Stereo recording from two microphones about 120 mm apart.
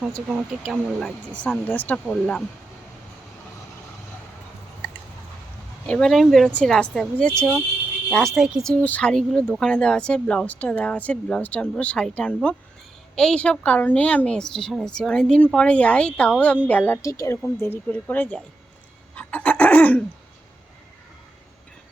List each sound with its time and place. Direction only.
0.6 s a woman's voice: centre (ahead or behind)
5.8 s speech: 5° left (ahead or behind)
8.7 s a woman's voice: 10° left (ahead or behind); by 17.3 s 25° left (ahead or behind)
17.6 s a woman's voice: 15° left (ahead or behind)
19.1 s a sound: 10° left (ahead or behind)